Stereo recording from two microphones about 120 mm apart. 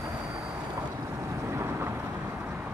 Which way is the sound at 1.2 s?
25° right (ahead or behind).